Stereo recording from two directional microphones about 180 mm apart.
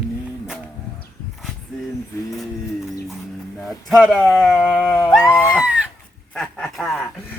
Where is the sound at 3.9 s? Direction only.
Centre (ahead or behind).